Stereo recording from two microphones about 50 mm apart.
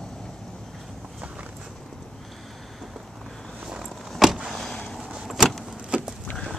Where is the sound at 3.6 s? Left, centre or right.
Centre.